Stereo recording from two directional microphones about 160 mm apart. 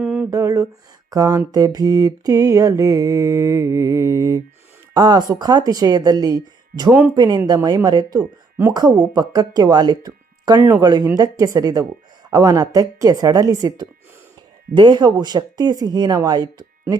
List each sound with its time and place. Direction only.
0.0 s a sound: 5° right (ahead or behind)
0.3 s mantra: 20° right (ahead or behind)
8.2 s speech: 15° right (ahead or behind)
10.6 s mantra: 20° right (ahead or behind)